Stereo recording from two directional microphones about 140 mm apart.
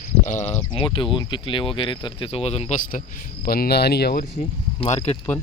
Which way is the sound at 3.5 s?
90° left.